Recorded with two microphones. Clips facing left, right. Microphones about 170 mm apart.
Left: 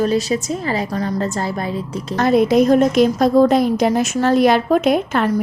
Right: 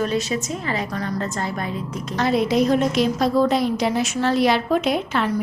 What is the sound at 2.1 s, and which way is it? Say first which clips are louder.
A woman's voice: left 6 dB; 50° left (ahead or behind).